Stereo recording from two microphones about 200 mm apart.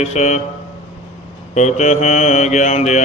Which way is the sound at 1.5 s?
35° left (ahead or behind).